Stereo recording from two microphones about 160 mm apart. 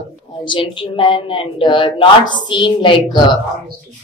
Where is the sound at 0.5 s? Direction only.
30° left (ahead or behind).